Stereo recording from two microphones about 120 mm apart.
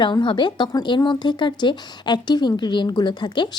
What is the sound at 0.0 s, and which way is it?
Speech, 40° left (ahead or behind).